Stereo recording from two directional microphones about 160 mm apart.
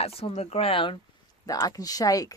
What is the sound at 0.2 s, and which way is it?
Speech, 40° left (ahead or behind).